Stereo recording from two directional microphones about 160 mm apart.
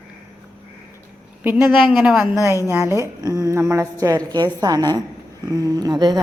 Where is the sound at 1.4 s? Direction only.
10° right (ahead or behind).